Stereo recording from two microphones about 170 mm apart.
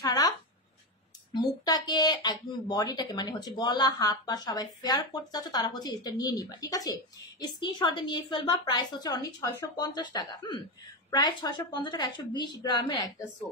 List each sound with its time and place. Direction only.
0.0 s speech: 20° left (ahead or behind)
1.3 s speech: 25° left (ahead or behind)